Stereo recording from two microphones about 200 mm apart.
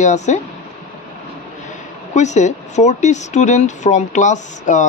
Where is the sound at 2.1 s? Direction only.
35° left (ahead or behind).